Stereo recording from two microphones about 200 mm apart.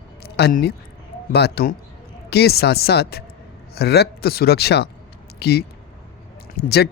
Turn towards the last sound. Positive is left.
turn(degrees=50)  # may be behind; listen again after turning